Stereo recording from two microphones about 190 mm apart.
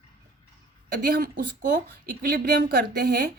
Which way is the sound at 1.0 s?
55° right (ahead or behind).